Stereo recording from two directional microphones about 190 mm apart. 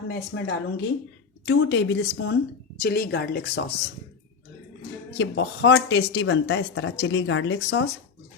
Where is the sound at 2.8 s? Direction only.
55° left (ahead or behind).